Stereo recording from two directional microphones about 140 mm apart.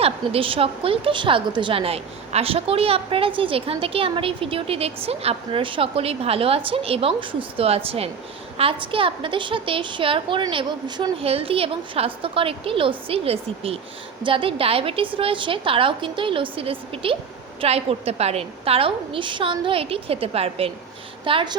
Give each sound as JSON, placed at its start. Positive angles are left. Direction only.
{"t": 0.0, "sound": "a woman's voice", "side_deg": -40}
{"t": 11.3, "sound": "a woman's voice", "side_deg": -45}